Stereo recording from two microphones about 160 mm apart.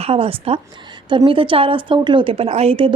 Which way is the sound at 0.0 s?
35° right (ahead or behind).